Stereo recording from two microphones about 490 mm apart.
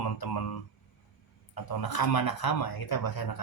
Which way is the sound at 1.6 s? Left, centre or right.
Left.